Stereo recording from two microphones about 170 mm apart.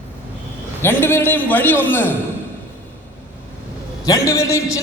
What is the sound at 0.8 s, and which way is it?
A man's voice, 10° left (ahead or behind).